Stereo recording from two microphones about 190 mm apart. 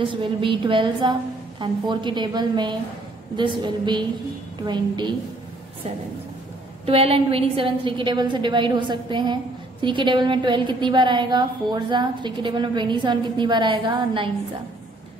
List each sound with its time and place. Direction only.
0.0 s a woman's voice: 25° right (ahead or behind)
6.9 s a woman's voice: 30° right (ahead or behind)